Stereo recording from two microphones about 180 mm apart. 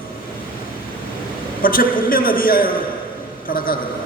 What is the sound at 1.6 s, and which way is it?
A man's voice, 50° left (ahead or behind).